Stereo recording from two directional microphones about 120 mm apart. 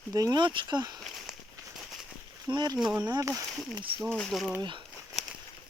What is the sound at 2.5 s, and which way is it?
Speech, 10° right (ahead or behind).